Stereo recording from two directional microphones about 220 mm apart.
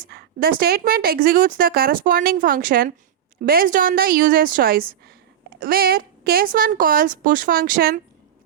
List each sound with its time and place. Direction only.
0.1 s a woman's voice: 45° right (ahead or behind)